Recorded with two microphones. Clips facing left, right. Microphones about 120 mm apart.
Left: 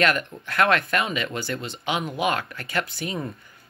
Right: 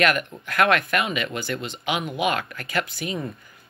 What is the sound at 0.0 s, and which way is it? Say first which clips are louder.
Speech: right 1 dB; 30° left (ahead or behind).